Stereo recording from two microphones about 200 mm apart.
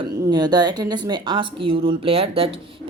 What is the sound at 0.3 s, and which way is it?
Speech, 20° right (ahead or behind).